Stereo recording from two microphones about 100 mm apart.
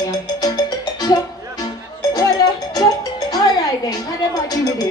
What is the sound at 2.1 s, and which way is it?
Music, 35° left (ahead or behind).